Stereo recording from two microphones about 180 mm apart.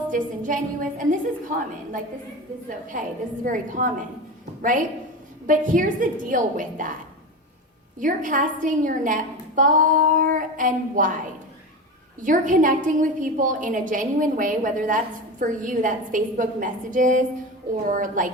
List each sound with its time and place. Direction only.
0.1 s a woman's voice: 45° right (ahead or behind)
7.9 s a woman's voice: 45° right (ahead or behind)
12.2 s a woman's voice: 45° right (ahead or behind)